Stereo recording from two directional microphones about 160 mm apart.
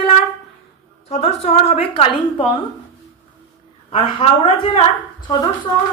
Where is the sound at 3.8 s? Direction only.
35° left (ahead or behind).